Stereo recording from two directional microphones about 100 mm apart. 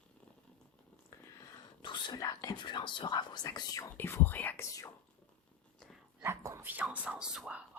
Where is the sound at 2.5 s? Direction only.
50° left (ahead or behind).